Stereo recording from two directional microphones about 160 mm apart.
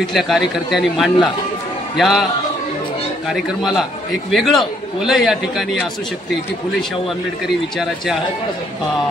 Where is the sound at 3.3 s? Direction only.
Centre (ahead or behind).